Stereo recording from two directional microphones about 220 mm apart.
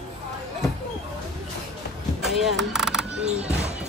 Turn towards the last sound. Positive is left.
turn(degrees=-30)  # may be behind; listen again after turning